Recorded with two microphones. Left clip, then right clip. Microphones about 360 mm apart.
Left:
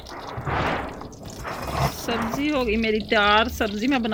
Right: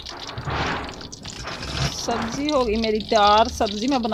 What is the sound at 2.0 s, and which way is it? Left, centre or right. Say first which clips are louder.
Speech: even; centre.